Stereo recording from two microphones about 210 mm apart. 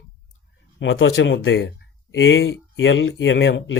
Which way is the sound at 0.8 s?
70° left (ahead or behind).